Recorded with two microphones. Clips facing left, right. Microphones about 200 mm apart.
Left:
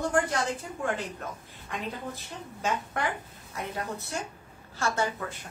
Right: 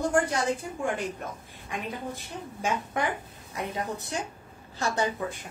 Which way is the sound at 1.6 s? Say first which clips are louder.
Right 1 dB; 15° right (ahead or behind).